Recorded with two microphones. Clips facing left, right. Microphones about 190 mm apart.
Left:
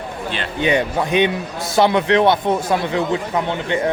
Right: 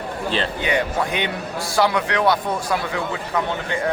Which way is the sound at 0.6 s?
20° left (ahead or behind).